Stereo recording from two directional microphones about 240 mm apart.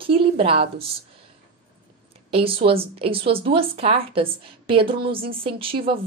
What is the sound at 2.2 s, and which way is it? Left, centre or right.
A woman's voice, right.